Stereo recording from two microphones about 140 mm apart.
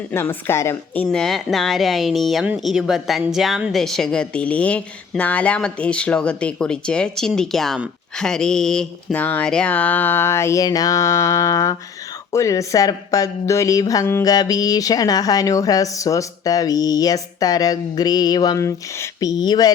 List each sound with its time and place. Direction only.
0.1 s speech: 15° left (ahead or behind)
1.0 s a woman's voice: 5° left (ahead or behind); by 19.7 s 30° left (ahead or behind)